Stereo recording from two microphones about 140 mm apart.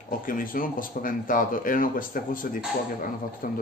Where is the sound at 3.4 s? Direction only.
90° left.